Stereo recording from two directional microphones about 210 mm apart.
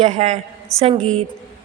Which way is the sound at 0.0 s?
35° right (ahead or behind).